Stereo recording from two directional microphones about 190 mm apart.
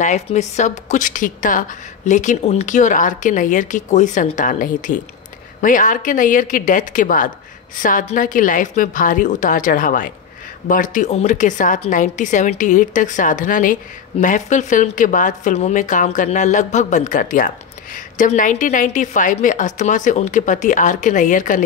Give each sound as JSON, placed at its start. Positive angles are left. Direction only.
{"t": 0.0, "sound": "a woman's voice", "side_deg": 40}